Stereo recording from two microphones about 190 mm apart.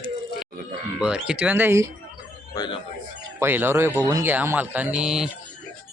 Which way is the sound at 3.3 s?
10° right (ahead or behind).